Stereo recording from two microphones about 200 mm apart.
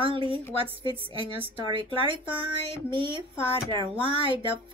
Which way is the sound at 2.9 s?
25° right (ahead or behind).